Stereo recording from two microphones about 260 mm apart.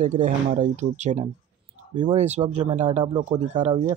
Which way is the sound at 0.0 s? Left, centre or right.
Right.